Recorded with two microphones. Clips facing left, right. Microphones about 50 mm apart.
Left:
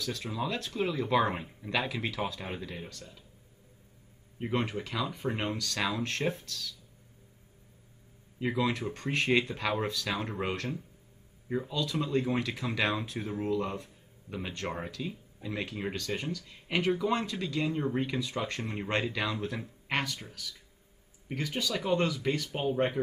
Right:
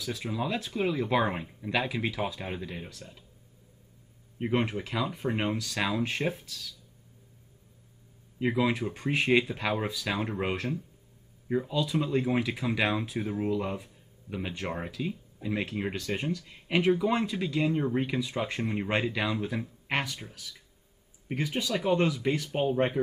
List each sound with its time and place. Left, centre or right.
0.0 s speech: centre
3.0 s speech: centre
4.4 s speech: centre
8.4 s speech: centre